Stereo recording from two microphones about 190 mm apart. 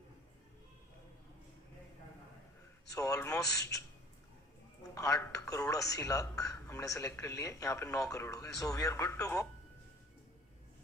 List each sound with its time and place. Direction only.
3.1 s speech: 15° left (ahead or behind)